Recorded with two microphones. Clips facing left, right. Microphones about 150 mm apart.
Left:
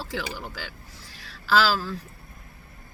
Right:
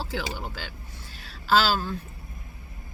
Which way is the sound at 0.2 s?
30° right (ahead or behind).